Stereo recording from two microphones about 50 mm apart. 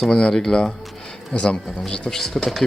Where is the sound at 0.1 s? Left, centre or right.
Centre.